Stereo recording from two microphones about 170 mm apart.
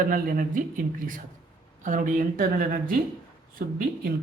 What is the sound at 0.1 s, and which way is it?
Speech, 55° right (ahead or behind).